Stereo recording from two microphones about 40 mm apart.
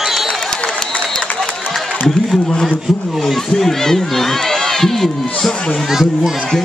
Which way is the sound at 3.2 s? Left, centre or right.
Centre.